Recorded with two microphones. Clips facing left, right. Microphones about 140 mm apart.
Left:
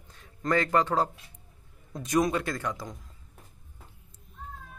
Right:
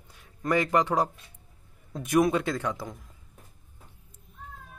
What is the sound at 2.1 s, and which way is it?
Speech, 10° right (ahead or behind).